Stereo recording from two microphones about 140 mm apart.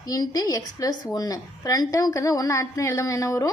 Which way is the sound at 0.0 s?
25° left (ahead or behind).